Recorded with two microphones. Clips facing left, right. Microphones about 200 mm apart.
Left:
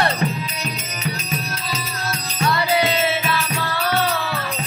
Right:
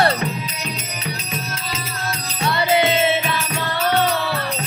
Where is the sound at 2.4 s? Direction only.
25° right (ahead or behind).